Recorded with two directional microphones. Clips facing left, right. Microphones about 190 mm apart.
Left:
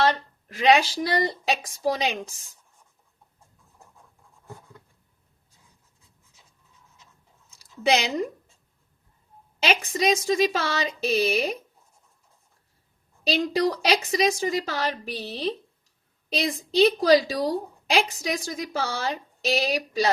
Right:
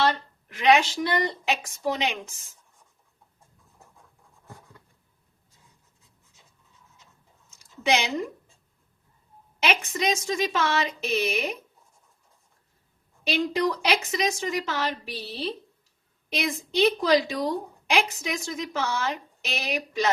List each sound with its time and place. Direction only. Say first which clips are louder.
0.4 s speech: left 1 dB; 35° left (ahead or behind)
7.5 s a sound: left 2 dB; 35° left (ahead or behind)
9.6 s speech: left 2 dB; 35° left (ahead or behind)
13.2 s speech: left 2 dB; 35° left (ahead or behind)